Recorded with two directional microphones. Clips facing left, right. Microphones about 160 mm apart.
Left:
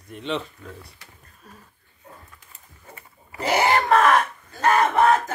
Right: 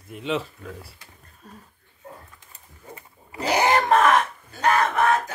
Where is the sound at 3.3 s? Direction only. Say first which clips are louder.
Even; 15° right (ahead or behind).